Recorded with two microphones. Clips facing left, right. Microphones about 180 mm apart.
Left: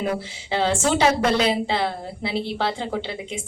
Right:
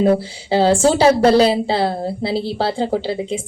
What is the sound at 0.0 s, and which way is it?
A woman's voice, 30° right (ahead or behind).